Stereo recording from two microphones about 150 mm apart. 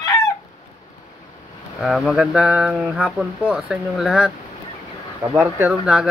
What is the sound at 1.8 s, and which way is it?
Speech, centre (ahead or behind).